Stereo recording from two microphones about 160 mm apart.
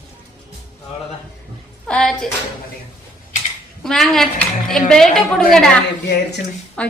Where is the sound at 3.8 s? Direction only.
Centre (ahead or behind).